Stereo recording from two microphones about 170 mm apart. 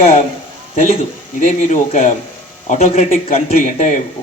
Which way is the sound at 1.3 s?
45° left (ahead or behind).